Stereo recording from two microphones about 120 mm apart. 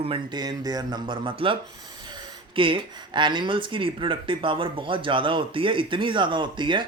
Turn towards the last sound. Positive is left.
turn(degrees=-45)  # may be behind; listen again after turning